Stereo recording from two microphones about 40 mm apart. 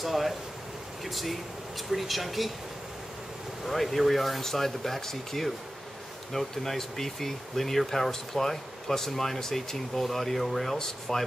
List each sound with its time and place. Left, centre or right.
0.0 s speech: centre
3.6 s speech: centre
10.8 s speech: centre